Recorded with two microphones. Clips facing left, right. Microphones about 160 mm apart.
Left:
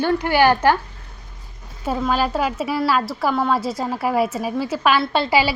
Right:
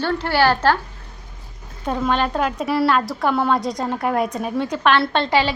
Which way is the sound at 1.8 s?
5° left (ahead or behind).